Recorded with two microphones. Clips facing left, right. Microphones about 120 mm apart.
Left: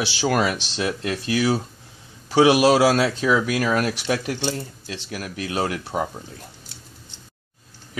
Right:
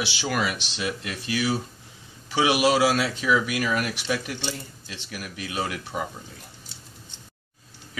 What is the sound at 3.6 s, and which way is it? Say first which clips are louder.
Speech: left 4 dB; 90° left.